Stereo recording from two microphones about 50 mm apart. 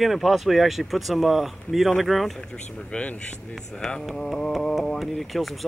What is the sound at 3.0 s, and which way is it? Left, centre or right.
Speech, left.